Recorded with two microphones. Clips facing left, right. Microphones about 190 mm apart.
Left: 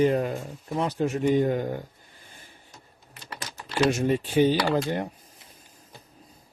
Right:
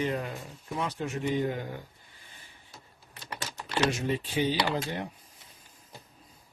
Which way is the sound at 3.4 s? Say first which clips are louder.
Left 5 dB; 5° left (ahead or behind).